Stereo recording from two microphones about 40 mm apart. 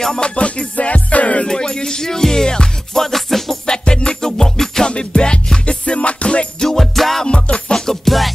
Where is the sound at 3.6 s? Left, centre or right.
Centre.